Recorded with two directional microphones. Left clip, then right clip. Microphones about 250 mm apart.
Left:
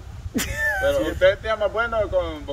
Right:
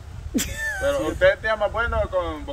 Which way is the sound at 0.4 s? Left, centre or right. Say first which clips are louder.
Left 4 dB; centre.